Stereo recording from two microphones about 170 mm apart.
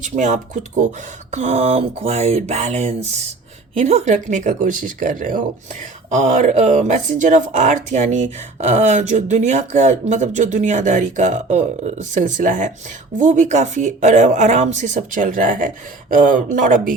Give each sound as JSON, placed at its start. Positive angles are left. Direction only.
{"t": 0.2, "sound": "speech", "side_deg": -45}